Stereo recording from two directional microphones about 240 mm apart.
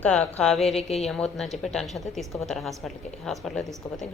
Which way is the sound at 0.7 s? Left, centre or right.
Left.